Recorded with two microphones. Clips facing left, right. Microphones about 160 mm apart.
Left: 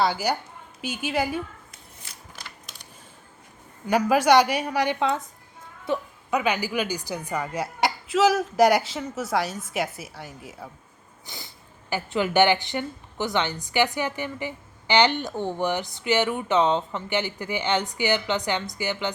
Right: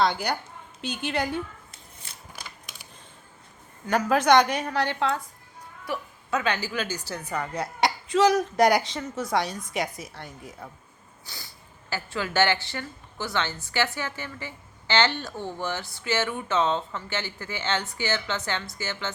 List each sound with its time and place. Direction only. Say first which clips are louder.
0.0 s speech: left 1 dB; 5° left (ahead or behind)
3.8 s a woman's voice: left 2 dB; 10° left (ahead or behind)
11.3 s speech: left 3 dB; 20° left (ahead or behind)